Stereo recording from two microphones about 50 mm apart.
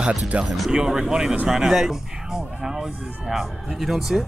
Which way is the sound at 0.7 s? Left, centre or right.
Centre.